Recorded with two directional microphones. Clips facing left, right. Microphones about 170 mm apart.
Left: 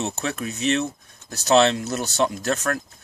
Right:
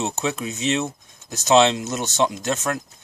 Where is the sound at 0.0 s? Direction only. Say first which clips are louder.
Right 2 dB; 20° right (ahead or behind).